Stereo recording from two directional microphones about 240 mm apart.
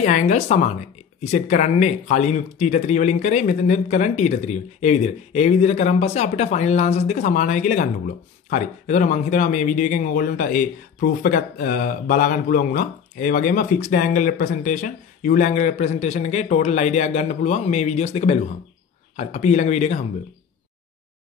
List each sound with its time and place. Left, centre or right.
0.0 s speech: left